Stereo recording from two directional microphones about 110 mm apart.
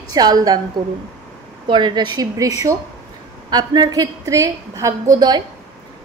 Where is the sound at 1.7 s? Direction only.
45° right (ahead or behind).